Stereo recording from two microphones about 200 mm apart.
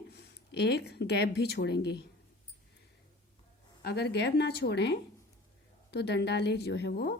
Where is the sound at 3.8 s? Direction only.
55° left (ahead or behind).